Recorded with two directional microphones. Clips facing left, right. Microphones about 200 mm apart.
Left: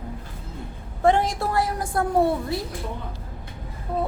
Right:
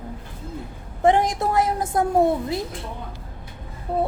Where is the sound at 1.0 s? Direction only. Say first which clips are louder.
Right 2 dB; 15° right (ahead or behind).